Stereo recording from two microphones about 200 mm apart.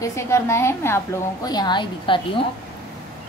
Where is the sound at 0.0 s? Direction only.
15° left (ahead or behind).